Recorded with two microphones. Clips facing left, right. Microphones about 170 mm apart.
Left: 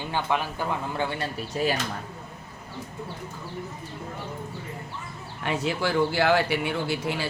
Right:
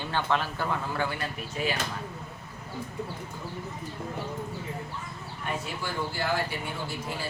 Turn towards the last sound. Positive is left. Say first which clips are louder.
# left 6 dB
turn(degrees=75)  # may be behind; listen again after turning